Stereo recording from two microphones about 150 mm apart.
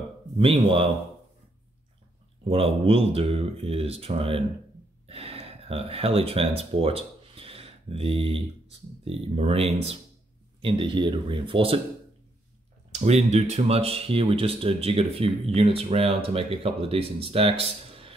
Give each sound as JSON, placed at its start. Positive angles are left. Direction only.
{"t": 0.4, "sound": "speech", "side_deg": -35}
{"t": 2.4, "sound": "speech", "side_deg": -40}
{"t": 10.6, "sound": "speech", "side_deg": -35}
{"t": 13.0, "sound": "speech", "side_deg": -50}